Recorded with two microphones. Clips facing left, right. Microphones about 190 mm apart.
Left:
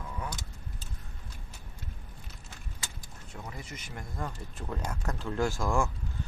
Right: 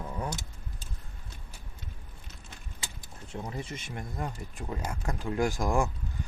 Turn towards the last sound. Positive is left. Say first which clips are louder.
# right 1 dB
turn(degrees=-15)  # may be behind; listen again after turning